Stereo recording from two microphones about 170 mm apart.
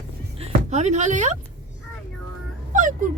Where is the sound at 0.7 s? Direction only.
45° right (ahead or behind).